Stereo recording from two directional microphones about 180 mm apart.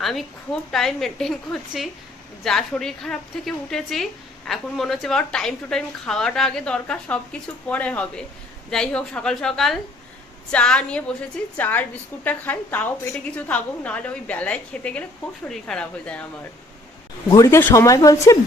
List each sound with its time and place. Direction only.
0.0 s a woman's voice: centre (ahead or behind)
17.3 s a woman's voice: 15° left (ahead or behind)